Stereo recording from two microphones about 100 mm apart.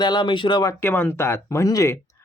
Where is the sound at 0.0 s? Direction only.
50° left (ahead or behind).